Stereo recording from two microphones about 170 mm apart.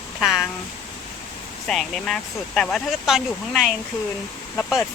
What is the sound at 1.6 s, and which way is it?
Speech, centre (ahead or behind).